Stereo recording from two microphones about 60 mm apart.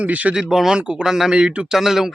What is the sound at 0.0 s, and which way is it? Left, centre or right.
Speech, right.